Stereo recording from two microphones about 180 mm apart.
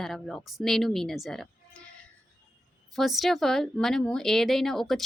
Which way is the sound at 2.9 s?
Centre (ahead or behind).